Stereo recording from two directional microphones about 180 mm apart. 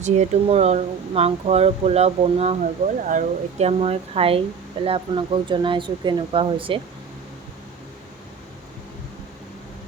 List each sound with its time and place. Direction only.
0.0 s speech: 35° right (ahead or behind)